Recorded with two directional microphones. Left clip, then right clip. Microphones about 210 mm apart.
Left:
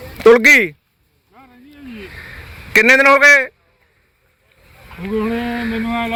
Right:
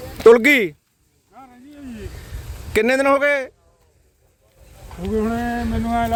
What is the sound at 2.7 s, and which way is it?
Speech, 5° right (ahead or behind).